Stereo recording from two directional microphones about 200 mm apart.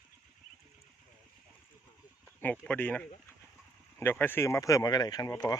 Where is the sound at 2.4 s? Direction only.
5° left (ahead or behind).